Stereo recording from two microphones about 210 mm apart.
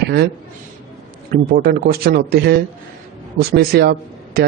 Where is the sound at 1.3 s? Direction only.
45° right (ahead or behind).